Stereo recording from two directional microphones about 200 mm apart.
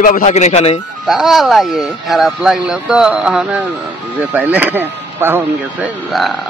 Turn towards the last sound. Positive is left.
turn(degrees=0)  # may be behind; listen again after turning